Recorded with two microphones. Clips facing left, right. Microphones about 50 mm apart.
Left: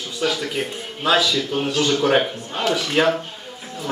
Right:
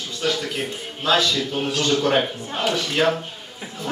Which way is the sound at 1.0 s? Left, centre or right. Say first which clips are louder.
Left 1 dB; centre.